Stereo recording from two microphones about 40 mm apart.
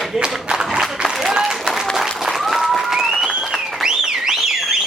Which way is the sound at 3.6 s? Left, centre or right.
Centre.